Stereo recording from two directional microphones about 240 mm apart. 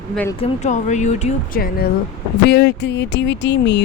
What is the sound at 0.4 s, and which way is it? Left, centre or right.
Speech, left.